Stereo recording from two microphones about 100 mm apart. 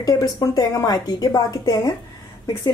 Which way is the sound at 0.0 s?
35° left (ahead or behind).